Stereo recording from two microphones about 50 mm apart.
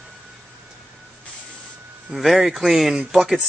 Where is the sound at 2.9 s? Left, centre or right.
Centre.